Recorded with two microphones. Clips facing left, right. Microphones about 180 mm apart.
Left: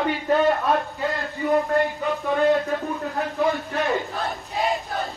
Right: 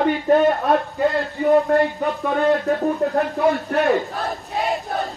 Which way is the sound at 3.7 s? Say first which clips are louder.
Right 6 dB; 65° right (ahead or behind).